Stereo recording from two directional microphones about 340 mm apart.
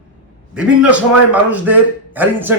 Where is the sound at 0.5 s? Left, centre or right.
Centre.